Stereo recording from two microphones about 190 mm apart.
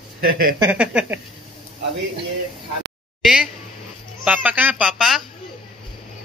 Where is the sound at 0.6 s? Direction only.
5° right (ahead or behind).